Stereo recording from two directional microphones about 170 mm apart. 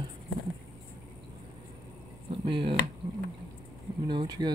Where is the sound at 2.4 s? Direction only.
30° right (ahead or behind).